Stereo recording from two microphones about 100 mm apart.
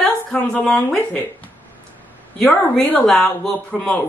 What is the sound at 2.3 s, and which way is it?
A woman's voice, 5° left (ahead or behind).